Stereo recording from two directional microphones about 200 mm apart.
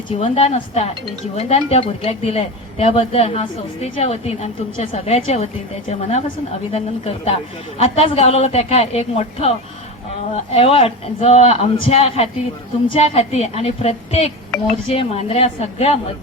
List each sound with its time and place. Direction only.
0.2 s a woman's voice: 30° left (ahead or behind)